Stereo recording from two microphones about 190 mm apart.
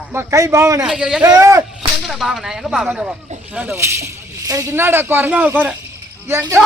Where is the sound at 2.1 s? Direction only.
Centre (ahead or behind).